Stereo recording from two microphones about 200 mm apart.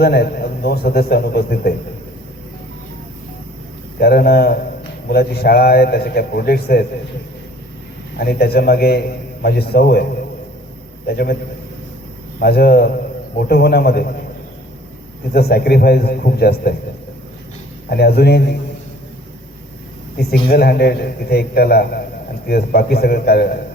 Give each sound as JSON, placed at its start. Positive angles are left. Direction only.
{"t": 0.0, "sound": "a man's voice", "side_deg": 50}
{"t": 4.0, "sound": "a man's voice", "side_deg": 50}
{"t": 8.2, "sound": "a man's voice", "side_deg": 50}
{"t": 12.4, "sound": "a man's voice", "side_deg": 50}
{"t": 15.3, "sound": "a man's voice", "side_deg": 50}
{"t": 17.8, "sound": "a man's voice", "side_deg": 50}
{"t": 20.1, "sound": "a man's voice", "side_deg": 50}